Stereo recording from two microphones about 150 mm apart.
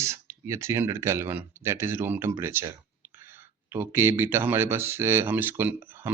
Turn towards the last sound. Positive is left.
turn(degrees=-15)  # may be behind; listen again after turning